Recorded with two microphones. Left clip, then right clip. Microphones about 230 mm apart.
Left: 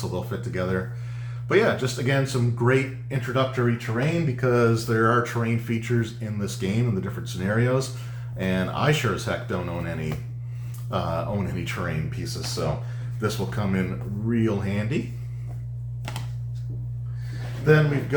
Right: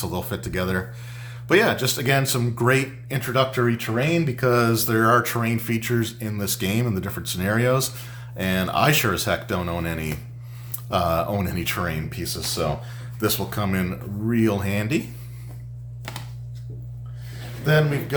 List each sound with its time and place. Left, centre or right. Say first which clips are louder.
0.1 s speech: right 2 dB; right